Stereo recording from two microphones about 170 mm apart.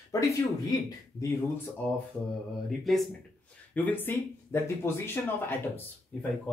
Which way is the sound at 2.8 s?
Centre (ahead or behind).